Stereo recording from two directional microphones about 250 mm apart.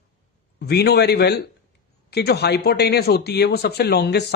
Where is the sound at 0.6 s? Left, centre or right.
Left.